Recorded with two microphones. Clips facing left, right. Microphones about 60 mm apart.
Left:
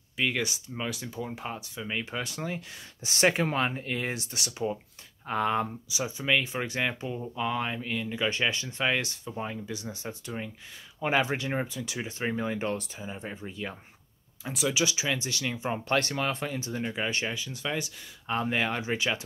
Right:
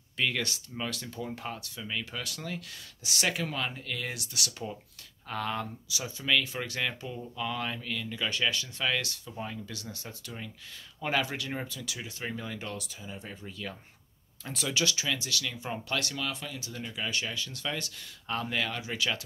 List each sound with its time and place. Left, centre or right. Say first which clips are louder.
0.2 s speech: left 2 dB; centre
4.5 s speech: left 7 dB; centre
14.4 s speech: left 3 dB; centre; by 17.4 s left
17.4 s speech: left 3 dB; centre